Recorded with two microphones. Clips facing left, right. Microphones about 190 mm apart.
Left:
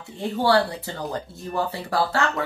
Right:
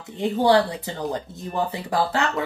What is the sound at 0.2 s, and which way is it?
Speech, 20° right (ahead or behind).